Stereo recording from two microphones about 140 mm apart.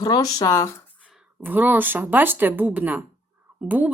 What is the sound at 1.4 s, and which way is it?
Speech, 15° right (ahead or behind).